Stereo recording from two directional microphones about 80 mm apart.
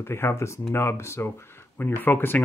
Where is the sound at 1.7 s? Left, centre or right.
Left.